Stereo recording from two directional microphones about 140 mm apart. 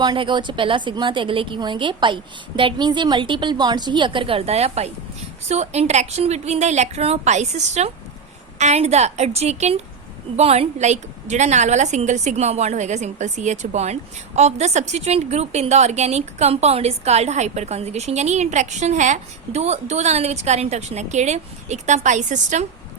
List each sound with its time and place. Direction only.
0.0 s a woman's voice: 35° right (ahead or behind); by 22.6 s 60° right (ahead or behind)